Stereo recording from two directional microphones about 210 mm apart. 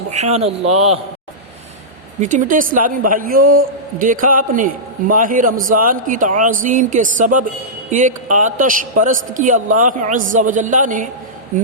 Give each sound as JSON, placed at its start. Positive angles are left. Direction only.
{"t": 0.1, "sound": "a man's voice", "side_deg": -30}
{"t": 2.2, "sound": "a man's voice", "side_deg": -40}